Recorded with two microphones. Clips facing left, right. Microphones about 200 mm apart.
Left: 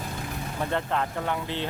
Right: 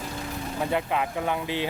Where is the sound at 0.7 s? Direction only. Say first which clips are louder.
Right 1 dB; 10° right (ahead or behind).